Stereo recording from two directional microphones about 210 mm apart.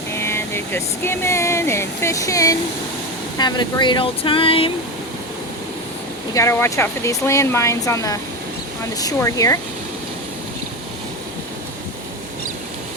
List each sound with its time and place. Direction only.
0.1 s speech: 10° left (ahead or behind)
6.3 s speech: 15° left (ahead or behind)